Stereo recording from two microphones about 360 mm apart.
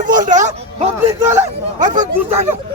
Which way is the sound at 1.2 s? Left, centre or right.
Centre.